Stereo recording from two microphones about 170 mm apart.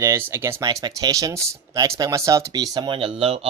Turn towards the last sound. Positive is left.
turn(degrees=-35)  # may be behind; listen again after turning